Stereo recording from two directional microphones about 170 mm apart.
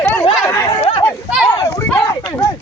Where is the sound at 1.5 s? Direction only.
20° left (ahead or behind).